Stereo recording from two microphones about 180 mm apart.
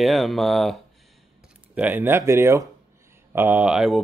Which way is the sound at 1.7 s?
10° right (ahead or behind).